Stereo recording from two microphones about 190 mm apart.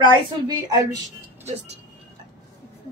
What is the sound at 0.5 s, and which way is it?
Speech, 20° right (ahead or behind).